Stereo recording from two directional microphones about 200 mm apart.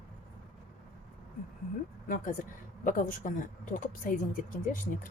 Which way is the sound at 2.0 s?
45° left (ahead or behind).